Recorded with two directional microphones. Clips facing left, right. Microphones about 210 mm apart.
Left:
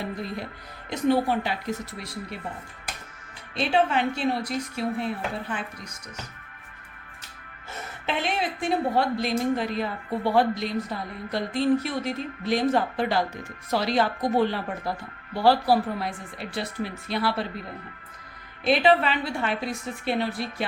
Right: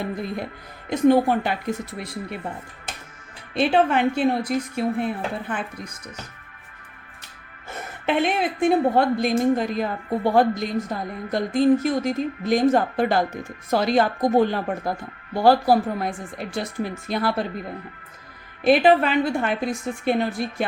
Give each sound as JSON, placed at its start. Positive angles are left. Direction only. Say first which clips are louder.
{"t": 0.9, "sound": "a woman's voice", "louder": "right 6 dB", "side_deg": -50}
{"t": 3.5, "sound": "a woman's voice", "louder": "right 4 dB", "side_deg": -55}
{"t": 8.0, "sound": "a woman's voice", "louder": "right 6 dB", "side_deg": -55}
{"t": 18.6, "sound": "a woman's voice", "louder": "right 4 dB", "side_deg": -50}